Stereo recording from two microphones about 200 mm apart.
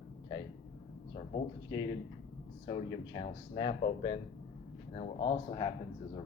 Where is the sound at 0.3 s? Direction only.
25° left (ahead or behind).